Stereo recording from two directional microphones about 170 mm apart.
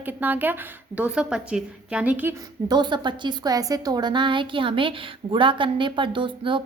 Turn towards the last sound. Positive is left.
turn(degrees=-30)  # may be behind; listen again after turning